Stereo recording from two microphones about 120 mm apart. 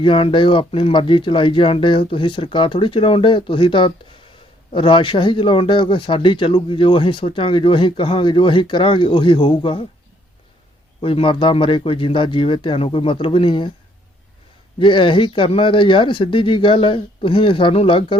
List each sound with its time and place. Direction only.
0.0 s speech: 45° left (ahead or behind)
11.0 s speech: 50° left (ahead or behind)
14.8 s speech: 45° left (ahead or behind)